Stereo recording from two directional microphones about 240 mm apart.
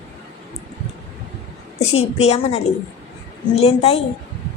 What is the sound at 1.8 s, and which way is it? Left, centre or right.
A woman's voice, left.